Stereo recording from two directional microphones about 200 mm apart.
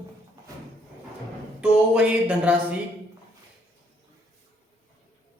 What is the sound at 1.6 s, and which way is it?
Speech, 5° right (ahead or behind).